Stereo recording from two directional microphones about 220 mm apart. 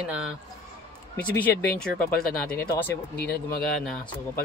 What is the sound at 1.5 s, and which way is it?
Speech, 45° left (ahead or behind).